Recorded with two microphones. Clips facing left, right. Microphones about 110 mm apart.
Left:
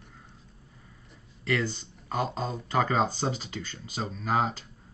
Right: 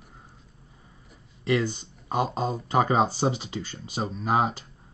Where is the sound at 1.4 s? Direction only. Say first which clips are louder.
Right 4 dB; 15° right (ahead or behind).